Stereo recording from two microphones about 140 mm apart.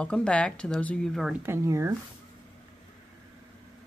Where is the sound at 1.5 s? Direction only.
20° right (ahead or behind).